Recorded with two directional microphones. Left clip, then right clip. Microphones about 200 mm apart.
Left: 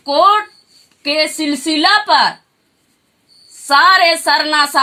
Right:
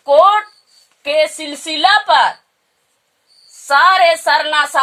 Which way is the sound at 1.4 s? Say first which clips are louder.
Left 1 dB; 40° right (ahead or behind).